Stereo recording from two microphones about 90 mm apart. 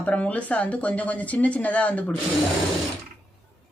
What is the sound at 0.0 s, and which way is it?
Speech, 15° left (ahead or behind).